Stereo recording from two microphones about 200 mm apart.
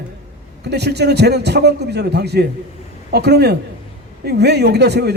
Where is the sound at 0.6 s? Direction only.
55° right (ahead or behind).